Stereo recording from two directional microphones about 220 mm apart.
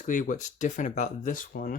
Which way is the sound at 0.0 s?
35° left (ahead or behind).